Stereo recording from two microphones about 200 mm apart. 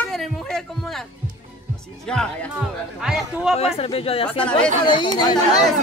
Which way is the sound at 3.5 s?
30° left (ahead or behind).